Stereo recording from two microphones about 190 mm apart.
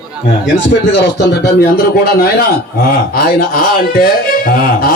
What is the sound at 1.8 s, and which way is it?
A man's voice, 55° left (ahead or behind).